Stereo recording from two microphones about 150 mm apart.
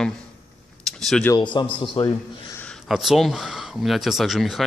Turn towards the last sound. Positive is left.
turn(degrees=0)  # may be behind; listen again after turning